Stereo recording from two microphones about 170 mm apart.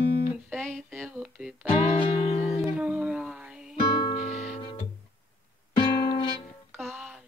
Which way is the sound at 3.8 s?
30° left (ahead or behind).